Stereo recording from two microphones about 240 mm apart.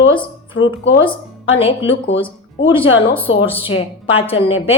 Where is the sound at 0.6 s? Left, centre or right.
Left.